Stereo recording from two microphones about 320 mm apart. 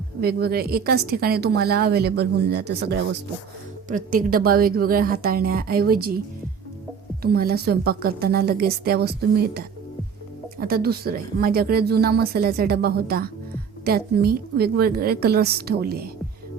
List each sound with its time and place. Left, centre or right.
0.2 s speech: right
3.8 s speech: right
7.2 s speech: right
10.6 s speech: right